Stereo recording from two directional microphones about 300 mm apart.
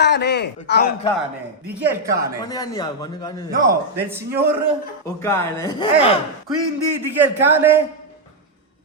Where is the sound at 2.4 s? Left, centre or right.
Centre.